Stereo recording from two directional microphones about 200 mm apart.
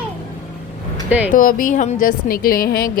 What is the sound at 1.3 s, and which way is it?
A woman's voice, 45° left (ahead or behind).